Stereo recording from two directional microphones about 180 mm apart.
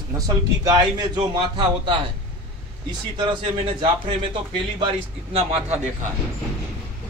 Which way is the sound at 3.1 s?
25° right (ahead or behind).